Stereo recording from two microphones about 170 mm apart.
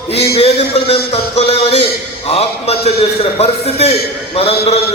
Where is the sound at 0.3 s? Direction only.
35° left (ahead or behind).